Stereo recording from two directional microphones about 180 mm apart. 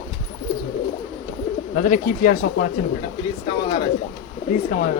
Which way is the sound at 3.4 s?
30° left (ahead or behind).